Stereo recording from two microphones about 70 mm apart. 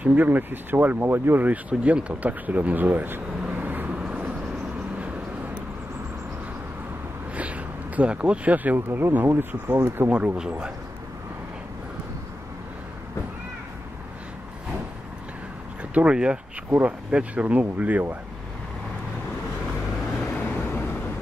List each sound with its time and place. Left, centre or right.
0.0 s speech: right
3.9 s vehicle: centre
7.3 s speech: centre
15.9 s speech: centre
20.4 s vehicle: left